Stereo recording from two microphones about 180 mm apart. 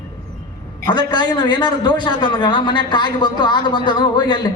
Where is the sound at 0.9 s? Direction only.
25° left (ahead or behind).